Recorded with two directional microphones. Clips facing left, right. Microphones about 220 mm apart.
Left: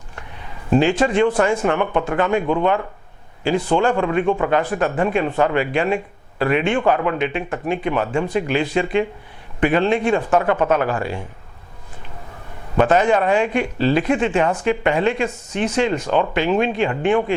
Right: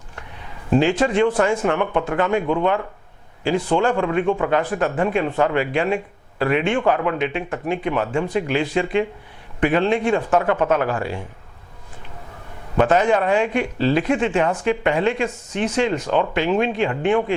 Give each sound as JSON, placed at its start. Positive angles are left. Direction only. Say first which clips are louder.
{"t": 0.7, "sound": "speech", "louder": "left 1 dB", "side_deg": 15}
{"t": 12.7, "sound": "speech", "louder": "left 1 dB", "side_deg": 15}